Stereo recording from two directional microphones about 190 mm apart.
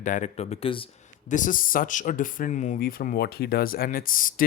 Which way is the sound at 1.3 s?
45° left (ahead or behind).